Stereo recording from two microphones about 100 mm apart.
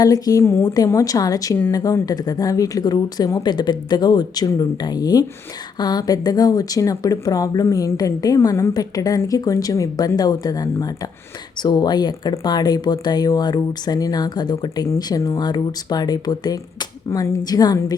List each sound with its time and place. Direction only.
0.0 s speech: 40° left (ahead or behind)
8.7 s speech: 35° left (ahead or behind)